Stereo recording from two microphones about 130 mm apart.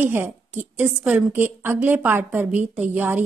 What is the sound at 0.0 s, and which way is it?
A woman's voice, 15° right (ahead or behind).